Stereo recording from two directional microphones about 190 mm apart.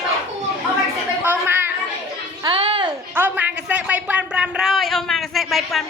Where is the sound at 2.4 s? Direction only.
30° right (ahead or behind).